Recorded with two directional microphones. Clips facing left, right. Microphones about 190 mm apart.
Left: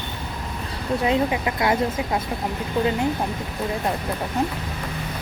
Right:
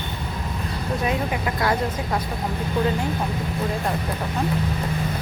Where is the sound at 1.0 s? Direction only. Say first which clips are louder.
Left 4 dB; 20° left (ahead or behind).